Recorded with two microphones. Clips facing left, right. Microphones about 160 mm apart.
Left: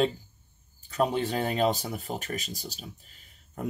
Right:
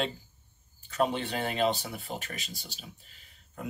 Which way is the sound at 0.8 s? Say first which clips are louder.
Left 2 dB; 40° left (ahead or behind).